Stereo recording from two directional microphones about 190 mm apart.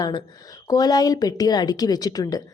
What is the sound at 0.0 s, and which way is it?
A woman's voice, 20° left (ahead or behind).